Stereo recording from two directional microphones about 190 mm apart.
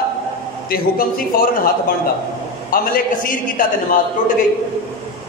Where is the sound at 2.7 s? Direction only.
50° left (ahead or behind).